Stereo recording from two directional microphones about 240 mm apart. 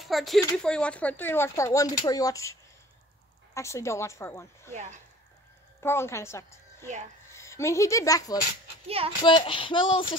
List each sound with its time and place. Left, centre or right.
0.0 s speech: centre
3.5 s speech: centre
5.8 s a woman's voice: centre
8.8 s speech: right
9.2 s speech: centre